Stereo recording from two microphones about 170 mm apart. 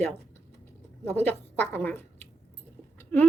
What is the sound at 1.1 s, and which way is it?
A woman's voice, 15° left (ahead or behind).